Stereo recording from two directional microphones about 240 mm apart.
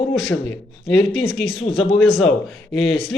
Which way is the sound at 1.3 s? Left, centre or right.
Centre.